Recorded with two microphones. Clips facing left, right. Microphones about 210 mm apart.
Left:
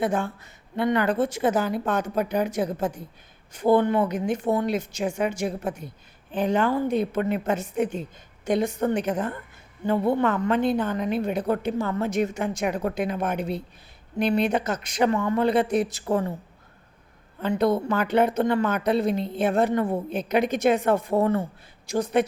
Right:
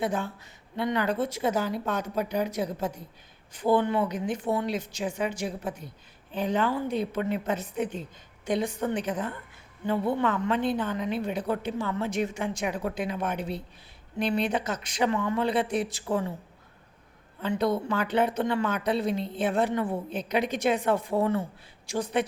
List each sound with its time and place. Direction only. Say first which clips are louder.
0.0 s a woman's voice: left 4 dB; 50° left (ahead or behind)
17.4 s a woman's voice: left 4 dB; 45° left (ahead or behind)